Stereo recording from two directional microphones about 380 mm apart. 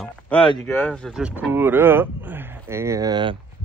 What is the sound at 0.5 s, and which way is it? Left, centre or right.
Speech, centre.